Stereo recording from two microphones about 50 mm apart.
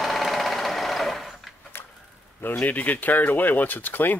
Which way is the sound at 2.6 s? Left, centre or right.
Left.